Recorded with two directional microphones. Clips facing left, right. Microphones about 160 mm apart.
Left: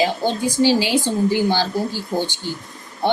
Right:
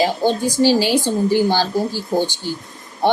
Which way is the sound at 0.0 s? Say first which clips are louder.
Right 2 dB; 40° right (ahead or behind).